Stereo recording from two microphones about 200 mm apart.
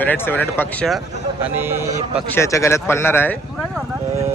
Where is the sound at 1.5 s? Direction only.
10° right (ahead or behind).